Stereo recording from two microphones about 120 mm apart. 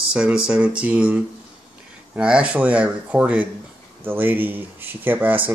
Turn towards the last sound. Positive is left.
turn(degrees=-15)  # may be behind; listen again after turning